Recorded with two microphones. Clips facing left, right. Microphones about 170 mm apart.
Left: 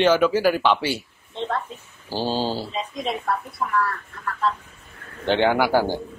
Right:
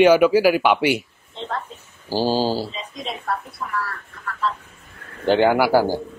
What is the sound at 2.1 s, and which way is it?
Speech, 10° right (ahead or behind).